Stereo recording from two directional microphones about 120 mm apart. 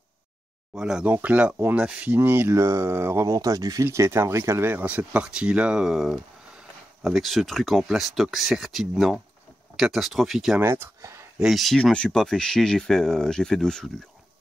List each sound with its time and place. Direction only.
0.7 s speech: 5° right (ahead or behind)
3.3 s speech: 30° right (ahead or behind); by 10.6 s 5° right (ahead or behind)
10.6 s speech: 20° right (ahead or behind)
11.3 s speech: centre (ahead or behind)